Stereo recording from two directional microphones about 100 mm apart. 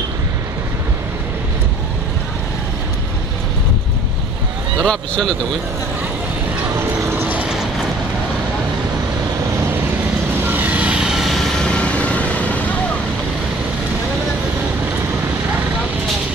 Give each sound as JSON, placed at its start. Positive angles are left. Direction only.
{"t": 4.7, "sound": "speech", "side_deg": 5}
{"t": 7.1, "sound": "vehicle", "side_deg": -20}
{"t": 10.4, "sound": "vehicle", "side_deg": -20}